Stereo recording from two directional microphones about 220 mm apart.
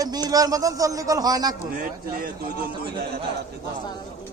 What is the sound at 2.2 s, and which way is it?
Speech, 45° right (ahead or behind).